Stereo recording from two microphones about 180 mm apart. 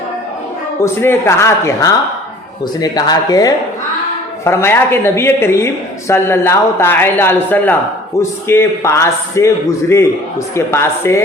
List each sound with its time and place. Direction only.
0.8 s speech: 15° left (ahead or behind)
10.5 s speech: 15° left (ahead or behind)